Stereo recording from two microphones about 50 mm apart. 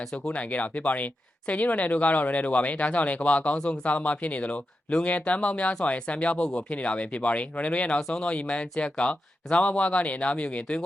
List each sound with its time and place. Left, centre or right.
0.3 s speech: left
7.9 s speech: centre
8.3 s speech: left